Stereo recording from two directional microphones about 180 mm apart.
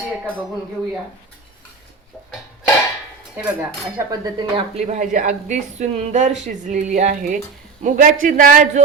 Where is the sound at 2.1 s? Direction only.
5° right (ahead or behind).